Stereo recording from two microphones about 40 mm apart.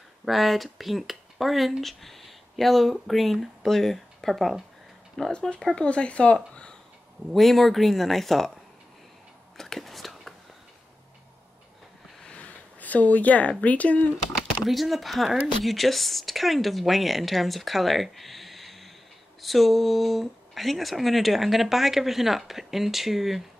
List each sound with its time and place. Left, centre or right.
0.2 s speech: centre
5.2 s speech: centre
5.8 s speech: left
6.5 s a sound: left
7.3 s speech: centre
9.6 s whispering: centre
12.8 s speech: left
14.6 s speech: centre